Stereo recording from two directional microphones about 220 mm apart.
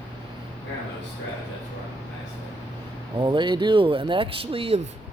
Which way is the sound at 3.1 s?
20° right (ahead or behind).